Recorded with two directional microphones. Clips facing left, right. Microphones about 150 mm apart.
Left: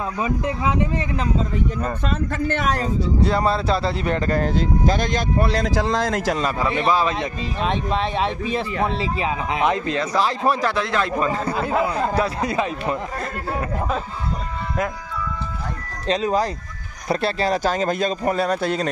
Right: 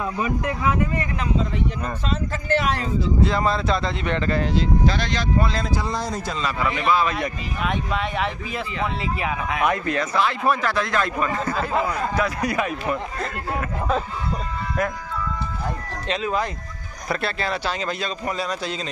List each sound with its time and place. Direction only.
0.5 s a man's voice: 20° left (ahead or behind)
2.0 s speech: 50° left (ahead or behind)
5.5 s speech: 85° left
6.6 s a man's voice: 35° left (ahead or behind)
10.1 s a man's voice: 35° left (ahead or behind)
16.1 s speech: 35° left (ahead or behind); by 18.9 s 55° left (ahead or behind)